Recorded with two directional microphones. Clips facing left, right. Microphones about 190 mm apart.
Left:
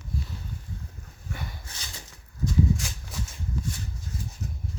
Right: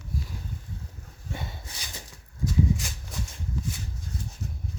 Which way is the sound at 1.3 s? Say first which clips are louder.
Right 2 dB; 25° right (ahead or behind).